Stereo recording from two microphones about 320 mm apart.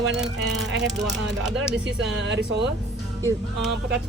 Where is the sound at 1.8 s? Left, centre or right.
Right.